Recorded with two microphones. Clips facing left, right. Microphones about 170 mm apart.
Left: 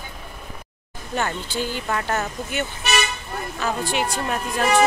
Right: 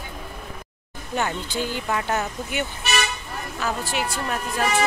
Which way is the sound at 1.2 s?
15° right (ahead or behind).